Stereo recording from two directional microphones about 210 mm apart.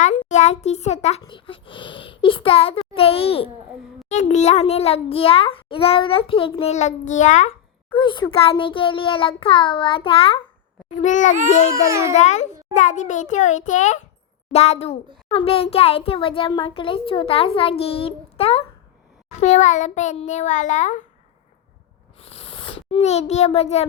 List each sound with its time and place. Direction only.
0.0 s a child's voice: 35° left (ahead or behind)
7.9 s a child's voice: 20° left (ahead or behind)
11.0 s a child's voice: 35° left (ahead or behind)
11.7 s a child's voice: 15° right (ahead or behind)
12.1 s a child's voice: 35° left (ahead or behind)
22.2 s a sound: 25° left (ahead or behind)